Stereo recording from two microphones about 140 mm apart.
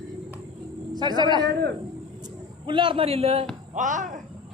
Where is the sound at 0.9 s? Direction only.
30° right (ahead or behind); by 3.4 s 45° right (ahead or behind).